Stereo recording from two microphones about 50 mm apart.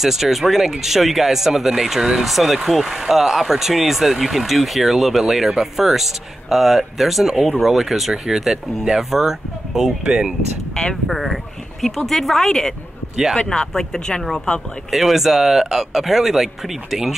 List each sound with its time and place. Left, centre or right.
0.0 s speech: centre
10.7 s speech: centre
11.1 s speech: centre
13.1 s speech: centre
13.4 s speech: centre
14.9 s speech: centre